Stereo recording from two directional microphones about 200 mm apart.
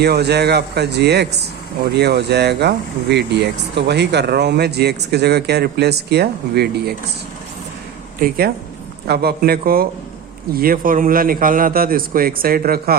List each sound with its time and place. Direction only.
0.0 s speech: 55° right (ahead or behind)
8.2 s a man's voice: 50° right (ahead or behind)